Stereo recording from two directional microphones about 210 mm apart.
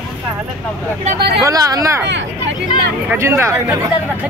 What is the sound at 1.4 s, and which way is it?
Speech, 15° right (ahead or behind).